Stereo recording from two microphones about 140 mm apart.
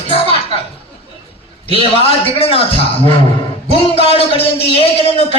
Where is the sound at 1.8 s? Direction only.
40° left (ahead or behind).